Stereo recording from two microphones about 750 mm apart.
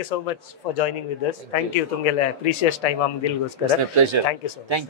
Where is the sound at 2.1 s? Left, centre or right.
Left.